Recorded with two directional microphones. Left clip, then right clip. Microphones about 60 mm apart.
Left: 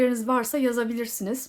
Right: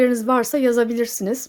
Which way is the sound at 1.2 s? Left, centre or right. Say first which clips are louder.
Right 7 dB; right.